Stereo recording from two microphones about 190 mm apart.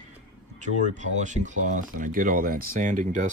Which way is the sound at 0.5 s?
40° right (ahead or behind).